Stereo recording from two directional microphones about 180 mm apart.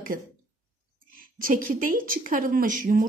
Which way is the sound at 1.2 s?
50° right (ahead or behind).